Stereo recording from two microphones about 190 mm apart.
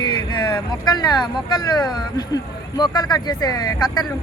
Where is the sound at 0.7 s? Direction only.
20° left (ahead or behind).